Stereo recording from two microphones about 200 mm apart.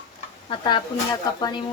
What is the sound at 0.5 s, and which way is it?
Speech, 20° left (ahead or behind).